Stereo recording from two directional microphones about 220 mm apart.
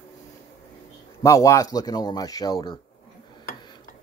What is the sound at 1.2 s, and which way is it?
A man's voice, 15° left (ahead or behind).